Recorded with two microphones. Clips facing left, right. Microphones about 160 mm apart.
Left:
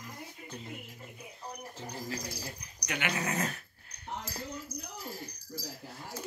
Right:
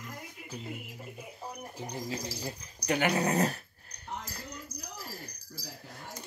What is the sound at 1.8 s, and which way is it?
Speech, 15° right (ahead or behind).